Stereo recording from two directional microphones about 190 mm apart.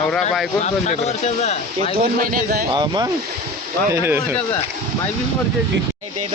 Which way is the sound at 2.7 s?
20° right (ahead or behind).